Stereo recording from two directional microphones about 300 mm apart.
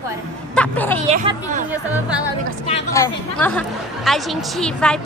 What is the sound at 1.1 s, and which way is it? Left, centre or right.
Speech, right.